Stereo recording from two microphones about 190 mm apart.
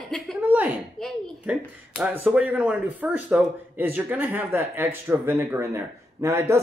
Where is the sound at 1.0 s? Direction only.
Centre (ahead or behind).